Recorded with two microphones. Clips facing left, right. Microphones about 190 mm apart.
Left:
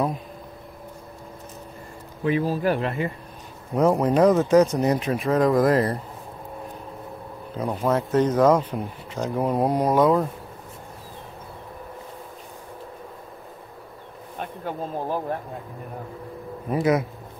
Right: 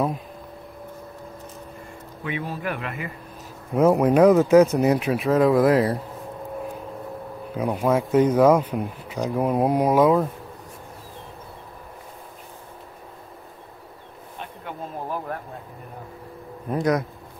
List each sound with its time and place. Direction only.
2.2 s speech: 35° left (ahead or behind)
3.7 s speech: 5° right (ahead or behind)
7.5 s speech: 10° right (ahead or behind)
14.6 s speech: 35° left (ahead or behind)
16.7 s speech: 5° left (ahead or behind)